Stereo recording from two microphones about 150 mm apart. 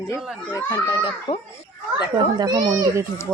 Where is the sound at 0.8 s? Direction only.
35° left (ahead or behind).